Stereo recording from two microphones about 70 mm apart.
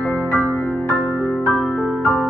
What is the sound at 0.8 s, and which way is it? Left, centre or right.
Music, centre.